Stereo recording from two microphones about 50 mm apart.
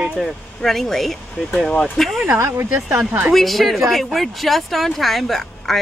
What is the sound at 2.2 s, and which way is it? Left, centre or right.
Speech, right.